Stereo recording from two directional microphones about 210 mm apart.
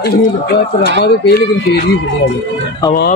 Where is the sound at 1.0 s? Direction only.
50° left (ahead or behind).